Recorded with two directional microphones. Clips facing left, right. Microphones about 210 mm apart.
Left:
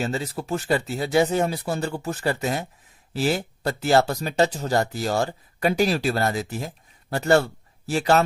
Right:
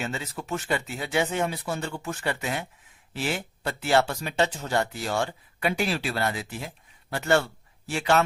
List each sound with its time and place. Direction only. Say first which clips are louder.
0.0 s speech: left 6 dB; 35° left (ahead or behind)